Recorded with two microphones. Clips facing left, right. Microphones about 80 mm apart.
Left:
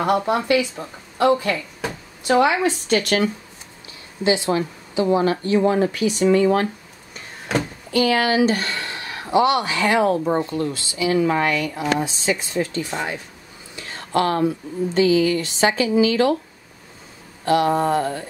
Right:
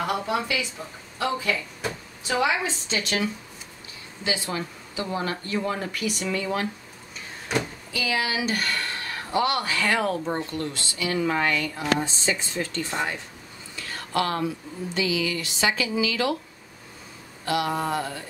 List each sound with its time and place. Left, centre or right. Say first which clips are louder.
0.0 s speech: left 7 dB; left
4.2 s speech: left 9 dB; left
5.0 s speech: left 11 dB; centre
6.3 s speech: left 10 dB; left
7.9 s speech: left 9 dB; left
8.5 s speech: left 5 dB; left
14.1 s speech: left 6 dB; left
17.5 s speech: left 8 dB; left